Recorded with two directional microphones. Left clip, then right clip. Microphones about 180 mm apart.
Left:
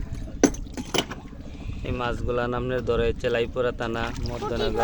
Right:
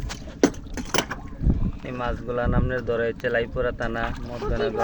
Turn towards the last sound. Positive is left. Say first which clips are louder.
# right 1 dB
turn(degrees=30)  # may be behind; listen again after turning